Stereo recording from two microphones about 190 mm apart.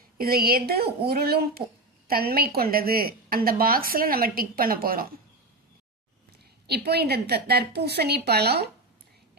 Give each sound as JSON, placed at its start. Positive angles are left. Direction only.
{"t": 0.2, "sound": "a woman's voice", "side_deg": -50}
{"t": 6.7, "sound": "a woman's voice", "side_deg": -60}